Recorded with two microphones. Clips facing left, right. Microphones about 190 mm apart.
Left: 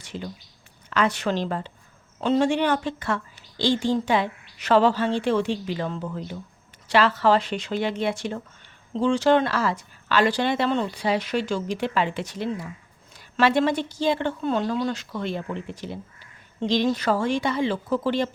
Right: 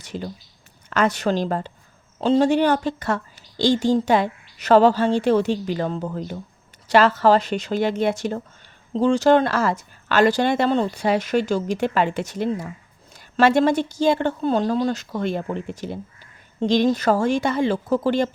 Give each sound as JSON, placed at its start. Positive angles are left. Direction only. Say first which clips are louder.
{"t": 0.0, "sound": "a woman's voice", "louder": "right 4 dB", "side_deg": -40}